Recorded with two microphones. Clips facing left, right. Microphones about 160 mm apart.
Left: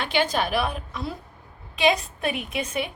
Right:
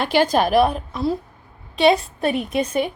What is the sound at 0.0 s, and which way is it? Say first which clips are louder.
A woman's voice: right 7 dB; 40° right (ahead or behind).